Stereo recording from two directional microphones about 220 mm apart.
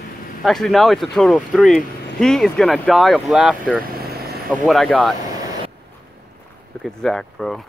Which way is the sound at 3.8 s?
45° right (ahead or behind).